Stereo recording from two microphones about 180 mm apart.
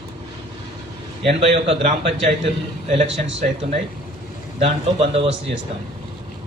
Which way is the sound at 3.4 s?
45° right (ahead or behind).